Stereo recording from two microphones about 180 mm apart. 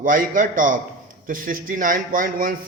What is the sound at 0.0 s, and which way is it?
A man's voice, 50° right (ahead or behind).